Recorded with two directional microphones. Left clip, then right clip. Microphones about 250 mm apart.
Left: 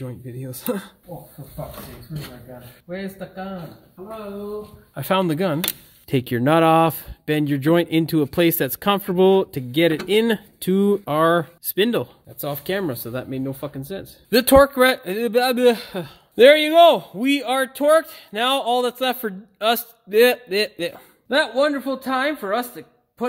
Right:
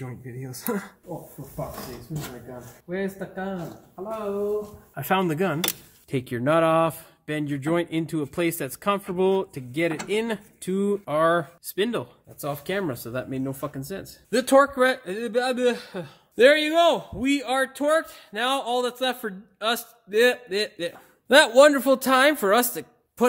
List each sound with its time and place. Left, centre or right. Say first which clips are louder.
0.0 s speech: left 4 dB; left
4.9 s speech: left 3 dB; left
6.0 s speech: left 5 dB; left; by 14.1 s centre
14.3 s a man's voice: left 5 dB; left
21.3 s speech: right 4 dB; right